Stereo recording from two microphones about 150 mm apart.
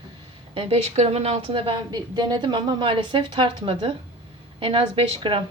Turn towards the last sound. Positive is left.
turn(degrees=-35)  # may be behind; listen again after turning